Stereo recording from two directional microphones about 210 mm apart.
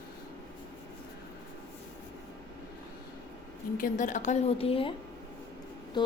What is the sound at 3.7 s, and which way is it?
A woman's voice, 40° left (ahead or behind).